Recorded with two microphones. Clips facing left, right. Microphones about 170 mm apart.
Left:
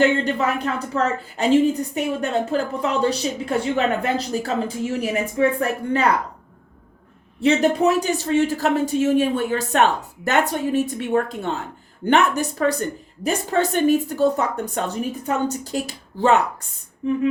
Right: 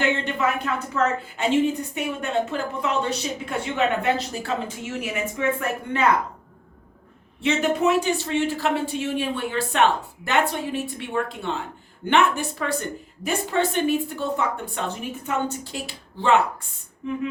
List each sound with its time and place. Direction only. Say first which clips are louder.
0.3 s a woman's voice: left 2 dB; 35° left (ahead or behind)
7.4 s a woman's voice: left 4 dB; 35° left (ahead or behind)